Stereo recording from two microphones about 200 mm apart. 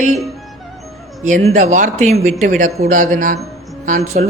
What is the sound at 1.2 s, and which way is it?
Speech, 35° right (ahead or behind).